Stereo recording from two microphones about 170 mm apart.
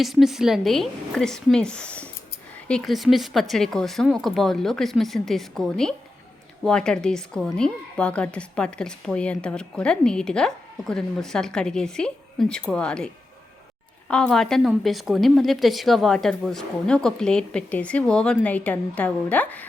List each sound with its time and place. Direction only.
0.0 s a woman's voice: centre (ahead or behind)
14.1 s a woman's voice: 5° left (ahead or behind)